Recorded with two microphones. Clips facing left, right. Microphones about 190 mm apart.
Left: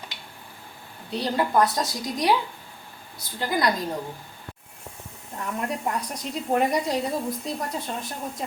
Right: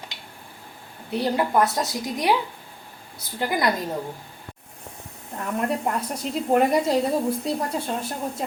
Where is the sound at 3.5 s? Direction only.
20° right (ahead or behind).